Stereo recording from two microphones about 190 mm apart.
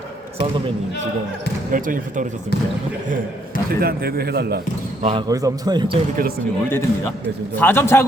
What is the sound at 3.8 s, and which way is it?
Speech, 55° right (ahead or behind).